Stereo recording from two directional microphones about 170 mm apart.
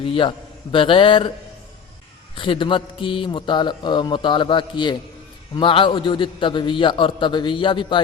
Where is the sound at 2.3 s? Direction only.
30° left (ahead or behind).